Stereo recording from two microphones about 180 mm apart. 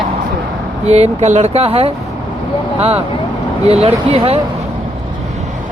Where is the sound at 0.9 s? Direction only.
40° right (ahead or behind).